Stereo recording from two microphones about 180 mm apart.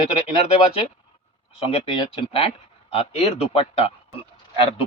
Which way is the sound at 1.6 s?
35° left (ahead or behind).